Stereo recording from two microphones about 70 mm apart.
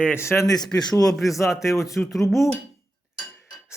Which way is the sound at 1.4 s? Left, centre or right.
Left.